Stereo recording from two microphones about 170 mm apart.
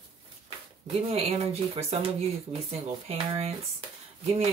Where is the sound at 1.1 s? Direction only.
35° right (ahead or behind).